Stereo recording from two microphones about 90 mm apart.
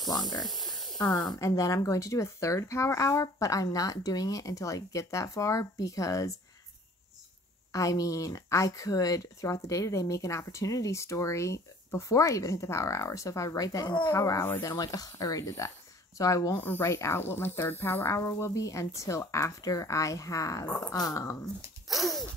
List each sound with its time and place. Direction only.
0.1 s speech: 50° left (ahead or behind)
0.5 s snake: centre (ahead or behind)
0.9 s speech: 45° left (ahead or behind)
7.7 s speech: 40° left (ahead or behind)
16.5 s speech: 20° left (ahead or behind)
16.8 s speech: 35° left (ahead or behind)
20.6 s speech: 15° left (ahead or behind)
20.9 s speech: 45° left (ahead or behind)
21.8 s a sound: centre (ahead or behind)